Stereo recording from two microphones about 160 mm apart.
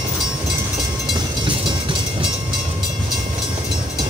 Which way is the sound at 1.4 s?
30° right (ahead or behind).